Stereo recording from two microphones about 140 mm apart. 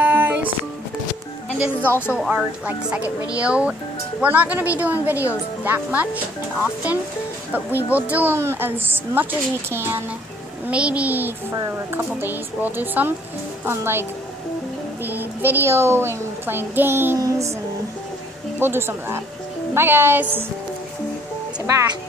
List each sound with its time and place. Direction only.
0.0 s a sound: 10° right (ahead or behind)
1.8 s a woman's voice: 15° left (ahead or behind)
2.1 s speech: 5° right (ahead or behind)
11.5 s a woman's voice: 25° right (ahead or behind)
12.0 s speech: 15° right (ahead or behind)
15.0 s a child's voice: 15° right (ahead or behind)
18.6 s speech: 15° right (ahead or behind)